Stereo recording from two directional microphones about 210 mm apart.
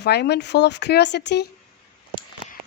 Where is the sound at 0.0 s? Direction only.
50° left (ahead or behind).